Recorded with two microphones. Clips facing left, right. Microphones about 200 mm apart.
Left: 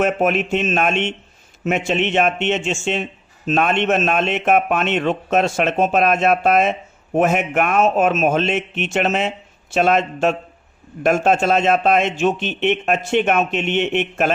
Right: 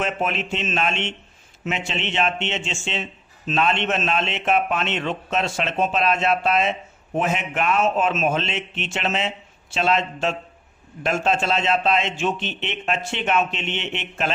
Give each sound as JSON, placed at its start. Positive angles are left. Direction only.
{"t": 0.0, "sound": "speech", "side_deg": 50}